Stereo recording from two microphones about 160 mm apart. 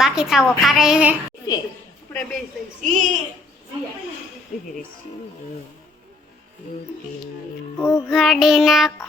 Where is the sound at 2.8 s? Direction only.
55° right (ahead or behind).